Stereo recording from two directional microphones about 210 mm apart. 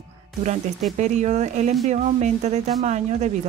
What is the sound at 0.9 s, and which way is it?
A woman's voice, 35° right (ahead or behind).